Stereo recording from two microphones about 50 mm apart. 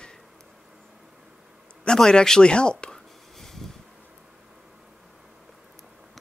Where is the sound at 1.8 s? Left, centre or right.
Centre.